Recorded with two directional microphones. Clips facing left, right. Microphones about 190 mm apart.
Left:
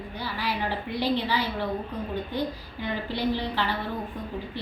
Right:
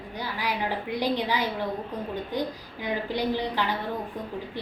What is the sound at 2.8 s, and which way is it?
Speech, 15° right (ahead or behind).